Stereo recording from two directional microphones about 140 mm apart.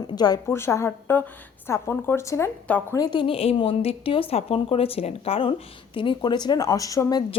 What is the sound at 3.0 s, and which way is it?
A woman's voice, 35° left (ahead or behind).